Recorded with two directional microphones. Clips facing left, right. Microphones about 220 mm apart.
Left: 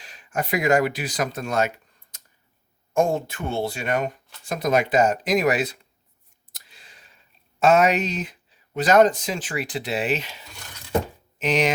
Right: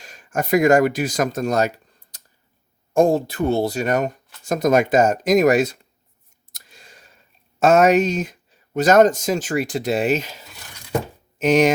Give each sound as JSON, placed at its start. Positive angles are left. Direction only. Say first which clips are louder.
{"t": 0.0, "sound": "speech", "louder": "right 3 dB", "side_deg": -45}
{"t": 6.5, "sound": "a sound", "louder": "right 5 dB", "side_deg": -45}
{"t": 7.6, "sound": "speech", "louder": "right 4 dB", "side_deg": -45}